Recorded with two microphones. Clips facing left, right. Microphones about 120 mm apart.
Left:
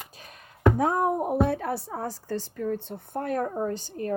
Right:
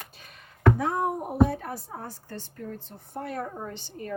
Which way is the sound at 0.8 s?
50° left (ahead or behind).